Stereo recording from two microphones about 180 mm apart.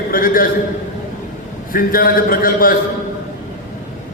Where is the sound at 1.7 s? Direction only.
55° left (ahead or behind).